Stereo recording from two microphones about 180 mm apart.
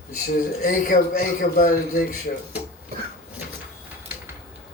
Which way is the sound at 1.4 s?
55° left (ahead or behind).